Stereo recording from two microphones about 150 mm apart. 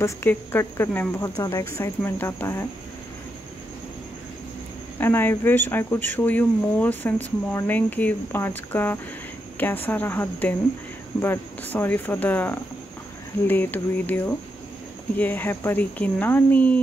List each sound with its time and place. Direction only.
0.0 s a woman's voice: 15° left (ahead or behind)
5.0 s a woman's voice: 15° left (ahead or behind)